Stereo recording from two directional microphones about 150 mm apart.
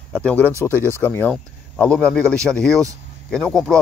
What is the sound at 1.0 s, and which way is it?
A man's voice, 10° left (ahead or behind).